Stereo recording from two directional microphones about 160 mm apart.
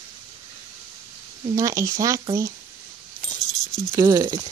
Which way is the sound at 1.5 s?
20° right (ahead or behind).